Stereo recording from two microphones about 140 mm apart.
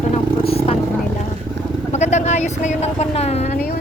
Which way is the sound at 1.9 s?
55° left (ahead or behind).